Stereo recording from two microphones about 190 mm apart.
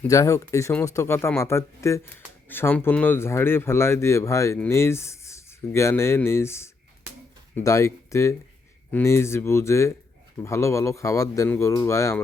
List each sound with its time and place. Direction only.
0.1 s speech: 15° left (ahead or behind)